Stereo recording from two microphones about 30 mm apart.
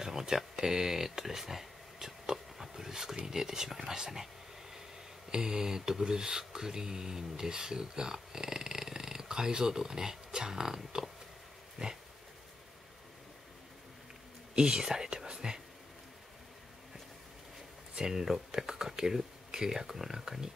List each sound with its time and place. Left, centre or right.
0.0 s speech: centre
5.3 s speech: right
14.5 s speech: right
17.9 s speech: centre